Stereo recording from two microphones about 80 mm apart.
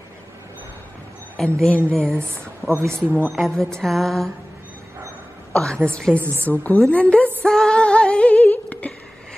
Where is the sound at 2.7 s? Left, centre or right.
Right.